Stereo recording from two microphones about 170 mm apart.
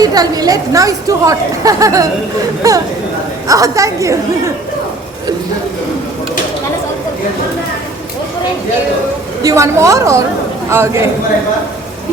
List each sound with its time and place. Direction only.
0.0 s a woman's voice: 20° right (ahead or behind)
9.4 s a woman's voice: 20° right (ahead or behind)